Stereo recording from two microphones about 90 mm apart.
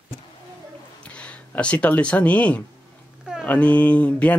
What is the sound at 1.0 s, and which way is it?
Speech, 15° left (ahead or behind).